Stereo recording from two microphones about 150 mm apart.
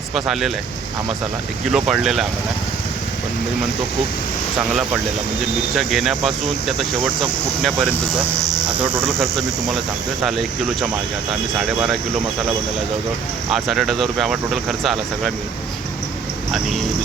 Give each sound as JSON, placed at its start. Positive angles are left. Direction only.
{"t": 0.1, "sound": "speech", "side_deg": 0}
{"t": 1.7, "sound": "speech", "side_deg": -5}
{"t": 5.7, "sound": "speech", "side_deg": 0}
{"t": 8.4, "sound": "insect", "side_deg": -25}
{"t": 10.2, "sound": "speech", "side_deg": 0}
{"t": 13.5, "sound": "speech", "side_deg": 0}